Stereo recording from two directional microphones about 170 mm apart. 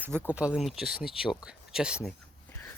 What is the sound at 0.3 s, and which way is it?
Speech, 5° right (ahead or behind).